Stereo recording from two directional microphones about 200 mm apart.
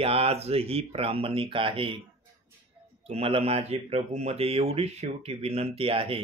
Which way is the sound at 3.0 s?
30° right (ahead or behind).